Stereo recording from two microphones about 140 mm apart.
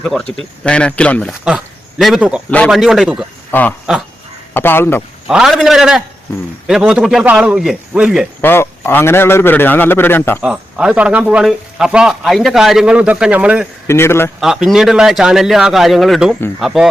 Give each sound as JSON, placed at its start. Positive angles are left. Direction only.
{"t": 0.6, "sound": "a man's voice", "side_deg": 10}
{"t": 1.3, "sound": "speech", "side_deg": -5}
{"t": 3.5, "sound": "a man's voice", "side_deg": 10}
{"t": 5.3, "sound": "speech", "side_deg": 0}
{"t": 8.4, "sound": "a man's voice", "side_deg": 15}
{"t": 10.4, "sound": "speech", "side_deg": -5}
{"t": 13.8, "sound": "a man's voice", "side_deg": 20}
{"t": 14.4, "sound": "speech", "side_deg": 0}